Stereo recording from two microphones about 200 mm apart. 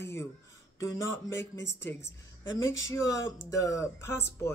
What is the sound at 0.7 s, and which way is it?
Speech, 15° left (ahead or behind).